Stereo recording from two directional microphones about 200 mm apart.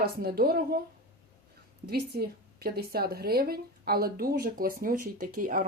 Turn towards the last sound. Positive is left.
turn(degrees=-45)  # may be behind; listen again after turning